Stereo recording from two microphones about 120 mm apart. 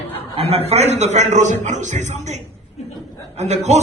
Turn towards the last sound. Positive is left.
turn(degrees=-70)  # may be behind; listen again after turning